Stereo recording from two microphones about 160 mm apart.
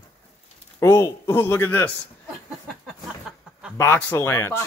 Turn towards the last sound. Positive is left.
turn(degrees=15)  # may be behind; listen again after turning